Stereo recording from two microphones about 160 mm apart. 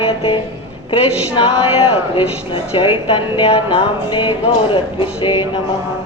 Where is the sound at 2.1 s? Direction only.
35° left (ahead or behind).